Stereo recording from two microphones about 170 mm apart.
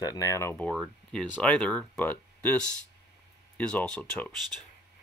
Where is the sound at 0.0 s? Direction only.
20° left (ahead or behind).